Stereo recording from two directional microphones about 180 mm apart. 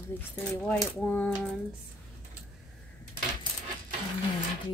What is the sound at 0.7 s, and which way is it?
Speech, 10° left (ahead or behind).